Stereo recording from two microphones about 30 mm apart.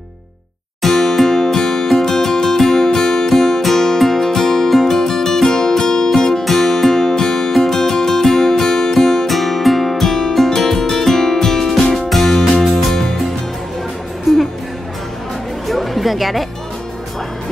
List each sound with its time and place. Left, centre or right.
0.8 s music: centre
4.6 s music: centre
4.9 s music: centre
6.4 s music: centre
9.3 s music: centre
14.3 s music: centre
15.7 s a sound: centre